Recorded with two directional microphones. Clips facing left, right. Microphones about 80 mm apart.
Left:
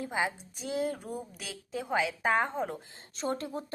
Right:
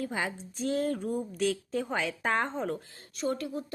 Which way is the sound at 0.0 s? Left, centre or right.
Centre.